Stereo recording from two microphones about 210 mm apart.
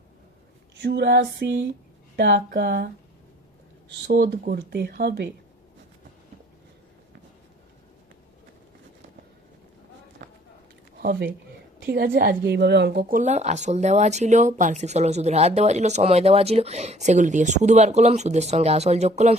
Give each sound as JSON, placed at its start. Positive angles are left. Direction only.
{"t": 0.8, "sound": "a woman's voice", "side_deg": -55}
{"t": 4.0, "sound": "speech", "side_deg": -45}
{"t": 10.9, "sound": "a woman's voice", "side_deg": -45}